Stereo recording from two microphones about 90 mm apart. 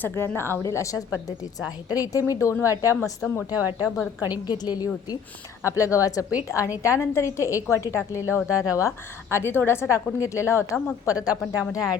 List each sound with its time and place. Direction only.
0.0 s a woman's voice: 25° left (ahead or behind)
3.5 s speech: 20° right (ahead or behind)
4.4 s a woman's voice: 50° left (ahead or behind)
5.6 s a woman's voice: 35° left (ahead or behind)
9.3 s a woman's voice: 25° left (ahead or behind); by 11.9 s 40° left (ahead or behind)